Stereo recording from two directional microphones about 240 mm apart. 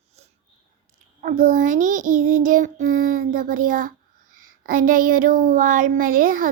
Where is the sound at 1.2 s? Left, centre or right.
Right.